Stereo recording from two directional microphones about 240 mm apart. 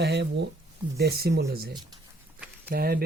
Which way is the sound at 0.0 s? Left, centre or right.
Right.